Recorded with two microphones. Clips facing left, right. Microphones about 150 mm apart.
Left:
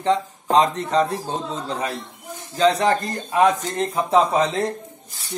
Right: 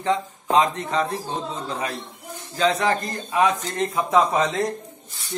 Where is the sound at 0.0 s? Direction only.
35° left (ahead or behind).